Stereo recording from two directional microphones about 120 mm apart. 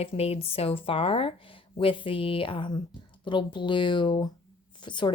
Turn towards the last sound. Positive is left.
turn(degrees=40)  # may be behind; listen again after turning